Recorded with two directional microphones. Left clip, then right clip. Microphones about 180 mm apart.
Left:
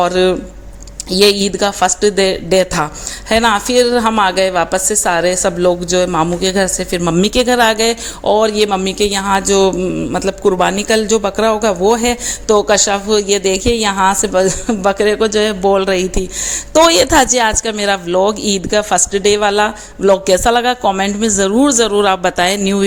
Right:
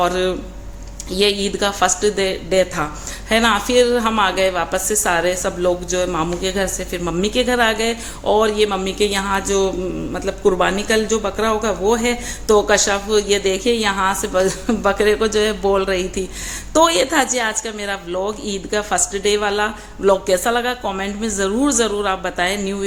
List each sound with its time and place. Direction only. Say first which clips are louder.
0.0 s speech: left 6 dB; 40° left (ahead or behind)